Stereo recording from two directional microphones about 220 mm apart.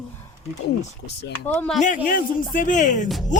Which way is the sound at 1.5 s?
5° left (ahead or behind).